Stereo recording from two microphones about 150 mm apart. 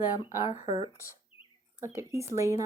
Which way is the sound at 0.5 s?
50° left (ahead or behind).